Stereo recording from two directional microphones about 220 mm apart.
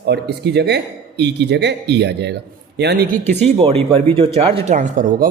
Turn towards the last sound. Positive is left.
turn(degrees=-35)  # may be behind; listen again after turning